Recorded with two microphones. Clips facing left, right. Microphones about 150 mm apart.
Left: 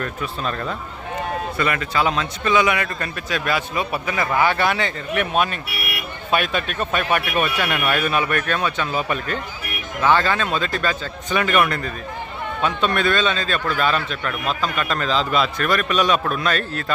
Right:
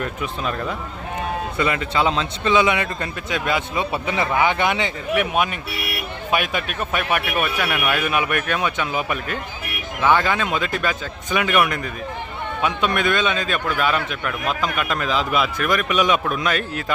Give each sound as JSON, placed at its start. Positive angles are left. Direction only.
{"t": 0.0, "sound": "speech", "side_deg": -15}
{"t": 1.5, "sound": "a man's voice", "side_deg": -20}